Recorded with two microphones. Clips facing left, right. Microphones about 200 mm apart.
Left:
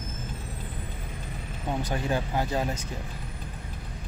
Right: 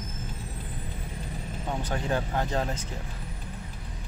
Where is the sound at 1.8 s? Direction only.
10° left (ahead or behind).